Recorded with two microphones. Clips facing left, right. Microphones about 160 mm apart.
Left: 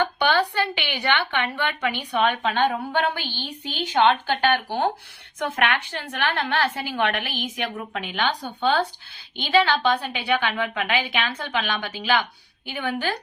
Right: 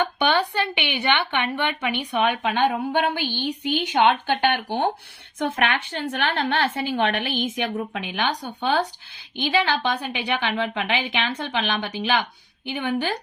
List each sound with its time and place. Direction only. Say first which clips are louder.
0.0 s a woman's voice: even; 20° right (ahead or behind)
7.9 s a woman's voice: even; 15° right (ahead or behind)